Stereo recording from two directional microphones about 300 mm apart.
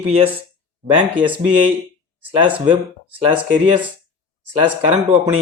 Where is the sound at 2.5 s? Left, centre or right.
Centre.